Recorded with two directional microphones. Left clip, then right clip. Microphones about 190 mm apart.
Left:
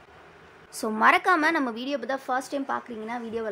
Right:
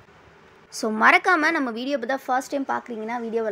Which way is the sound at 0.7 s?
15° right (ahead or behind).